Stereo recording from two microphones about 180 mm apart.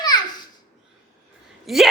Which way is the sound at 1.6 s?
Centre (ahead or behind).